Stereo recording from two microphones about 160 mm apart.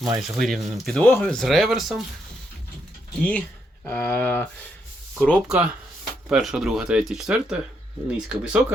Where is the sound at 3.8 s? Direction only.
10° left (ahead or behind).